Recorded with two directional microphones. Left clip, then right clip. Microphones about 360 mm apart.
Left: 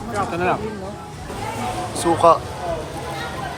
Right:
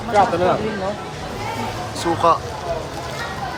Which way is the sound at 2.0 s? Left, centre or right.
Centre.